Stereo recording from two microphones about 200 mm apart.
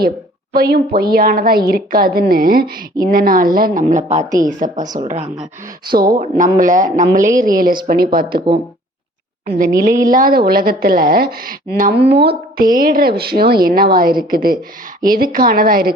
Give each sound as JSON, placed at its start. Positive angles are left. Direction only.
{"t": 0.5, "sound": "a woman's voice", "side_deg": -50}
{"t": 9.5, "sound": "a woman's voice", "side_deg": -45}